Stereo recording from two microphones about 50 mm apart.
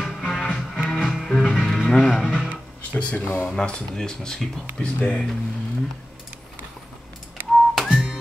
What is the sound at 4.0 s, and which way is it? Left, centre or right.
Speech, centre.